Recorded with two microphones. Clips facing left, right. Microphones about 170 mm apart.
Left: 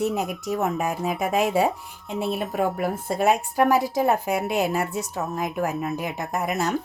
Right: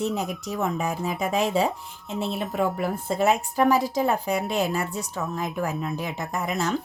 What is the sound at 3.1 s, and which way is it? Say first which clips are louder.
A woman's voice: left 1 dB; 15° left (ahead or behind).